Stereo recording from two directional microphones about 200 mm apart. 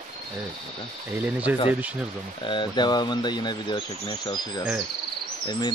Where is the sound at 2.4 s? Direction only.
25° left (ahead or behind).